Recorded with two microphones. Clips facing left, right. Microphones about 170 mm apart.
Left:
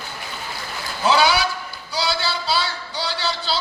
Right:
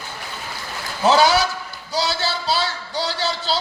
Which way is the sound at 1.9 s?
40° right (ahead or behind).